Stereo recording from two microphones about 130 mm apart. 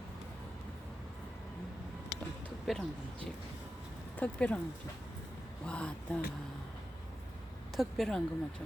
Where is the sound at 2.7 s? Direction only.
Centre (ahead or behind).